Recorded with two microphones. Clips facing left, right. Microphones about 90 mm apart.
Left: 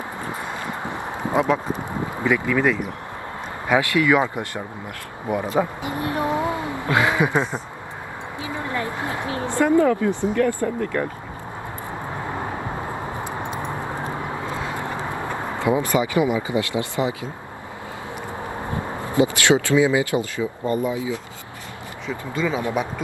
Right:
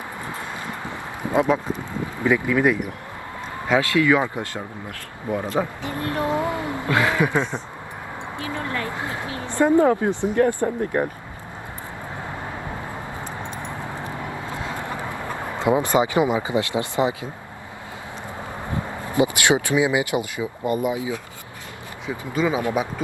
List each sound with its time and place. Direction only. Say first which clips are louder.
0.3 s clip-clop: left 2 dB; 20° left (ahead or behind)
2.2 s speech: right 1 dB; 15° right (ahead or behind)
3.7 s speech: even; 20° left (ahead or behind)
9.6 s speech: right 1 dB; 20° right (ahead or behind)
13.2 s vehicle: left 4 dB; 15° left (ahead or behind)
15.5 s speech: right 2 dB; 20° right (ahead or behind)
19.1 s speech: left 1 dB; 20° right (ahead or behind)